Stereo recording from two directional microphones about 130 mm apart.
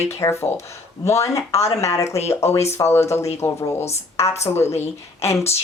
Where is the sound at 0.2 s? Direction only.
20° left (ahead or behind).